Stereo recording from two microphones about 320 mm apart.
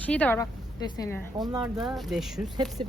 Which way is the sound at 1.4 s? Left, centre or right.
Centre.